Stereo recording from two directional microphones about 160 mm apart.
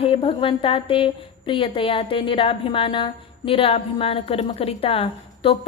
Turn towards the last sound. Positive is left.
turn(degrees=35)  # may be behind; listen again after turning